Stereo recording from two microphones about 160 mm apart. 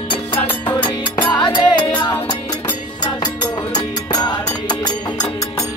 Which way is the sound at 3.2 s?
25° left (ahead or behind).